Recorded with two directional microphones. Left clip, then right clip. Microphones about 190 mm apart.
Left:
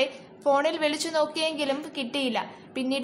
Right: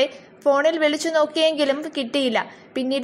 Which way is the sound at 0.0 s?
15° right (ahead or behind).